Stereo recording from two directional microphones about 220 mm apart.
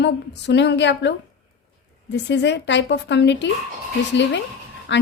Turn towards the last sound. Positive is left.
turn(degrees=55)  # may be behind; listen again after turning